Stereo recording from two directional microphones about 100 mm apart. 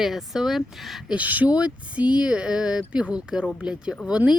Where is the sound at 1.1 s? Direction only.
15° right (ahead or behind).